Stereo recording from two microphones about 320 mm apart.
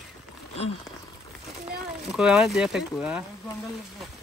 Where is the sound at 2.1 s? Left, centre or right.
Centre.